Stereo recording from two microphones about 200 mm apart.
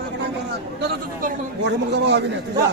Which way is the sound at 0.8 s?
60° right (ahead or behind).